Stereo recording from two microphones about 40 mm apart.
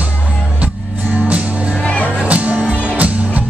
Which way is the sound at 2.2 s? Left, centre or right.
Right.